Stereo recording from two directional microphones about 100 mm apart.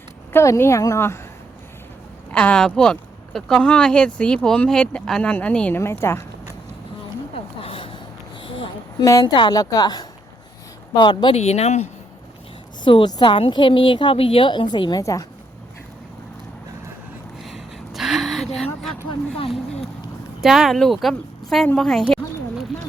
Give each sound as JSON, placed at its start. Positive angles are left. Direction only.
{"t": 0.3, "sound": "a woman's voice", "side_deg": 25}
{"t": 2.3, "sound": "speech", "side_deg": 10}
{"t": 5.8, "sound": "a woman's voice", "side_deg": 25}
{"t": 7.6, "sound": "a sound", "side_deg": 70}
{"t": 8.4, "sound": "a sound", "side_deg": 55}
{"t": 9.0, "sound": "a woman's voice", "side_deg": 35}
{"t": 9.2, "sound": "a woman's voice", "side_deg": 55}
{"t": 11.3, "sound": "speech", "side_deg": 90}
{"t": 12.8, "sound": "a woman's voice", "side_deg": 50}
{"t": 15.0, "sound": "speech", "side_deg": 35}
{"t": 17.4, "sound": "a sound", "side_deg": -5}
{"t": 20.4, "sound": "speech", "side_deg": 0}